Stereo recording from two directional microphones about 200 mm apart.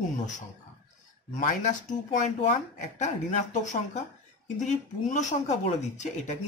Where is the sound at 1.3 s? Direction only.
40° left (ahead or behind).